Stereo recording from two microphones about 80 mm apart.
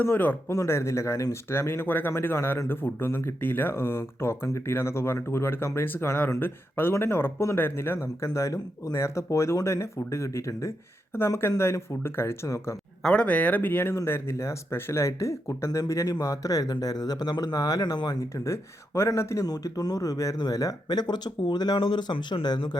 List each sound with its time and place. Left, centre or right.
0.0 s speech: left
0.5 s speech: left
13.0 s speech: centre; by 18.4 s left
18.4 s speech: left
19.5 s speech: left